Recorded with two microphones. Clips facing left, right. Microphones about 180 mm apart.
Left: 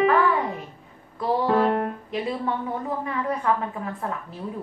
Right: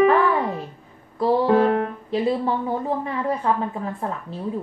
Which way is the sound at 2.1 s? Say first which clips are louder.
Right 6 dB; 30° right (ahead or behind).